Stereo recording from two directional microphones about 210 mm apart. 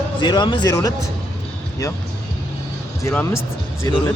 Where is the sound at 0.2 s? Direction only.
20° left (ahead or behind).